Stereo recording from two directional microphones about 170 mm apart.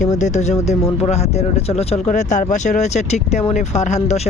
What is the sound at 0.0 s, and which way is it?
Speech, 45° left (ahead or behind).